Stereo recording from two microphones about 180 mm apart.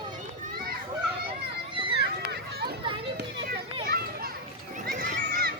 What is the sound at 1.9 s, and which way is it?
Run, 65° right (ahead or behind).